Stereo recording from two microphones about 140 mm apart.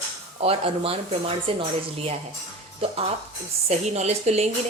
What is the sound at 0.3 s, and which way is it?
Speech, 45° right (ahead or behind).